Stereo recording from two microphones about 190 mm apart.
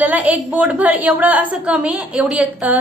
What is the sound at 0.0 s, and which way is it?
A woman's voice, 10° right (ahead or behind).